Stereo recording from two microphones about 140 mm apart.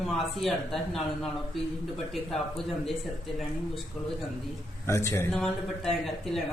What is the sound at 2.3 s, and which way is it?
Speech, centre (ahead or behind).